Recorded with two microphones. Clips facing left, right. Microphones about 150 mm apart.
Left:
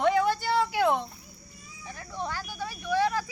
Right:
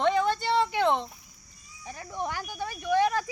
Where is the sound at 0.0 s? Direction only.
5° left (ahead or behind).